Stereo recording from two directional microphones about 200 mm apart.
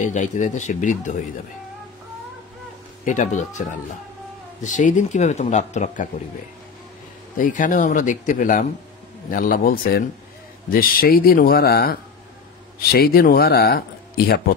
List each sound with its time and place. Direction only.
0.0 s a man's voice: 40° left (ahead or behind)
3.1 s a man's voice: 35° left (ahead or behind)
7.3 s a man's voice: 40° left (ahead or behind)